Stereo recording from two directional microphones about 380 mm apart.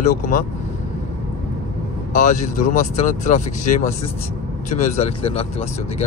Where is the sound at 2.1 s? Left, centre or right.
Centre.